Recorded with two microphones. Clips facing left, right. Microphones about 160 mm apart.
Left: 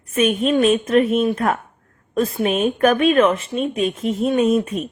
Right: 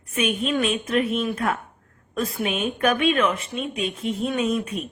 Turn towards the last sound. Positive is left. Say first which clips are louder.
# left 7 dB
turn(degrees=45)  # may be behind; listen again after turning